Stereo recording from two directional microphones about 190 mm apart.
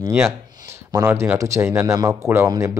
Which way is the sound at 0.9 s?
15° right (ahead or behind).